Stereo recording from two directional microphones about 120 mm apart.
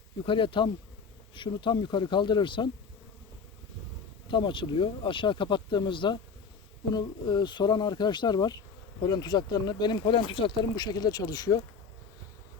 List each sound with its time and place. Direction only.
0.3 s speech: 45° left (ahead or behind)
4.3 s speech: 40° left (ahead or behind)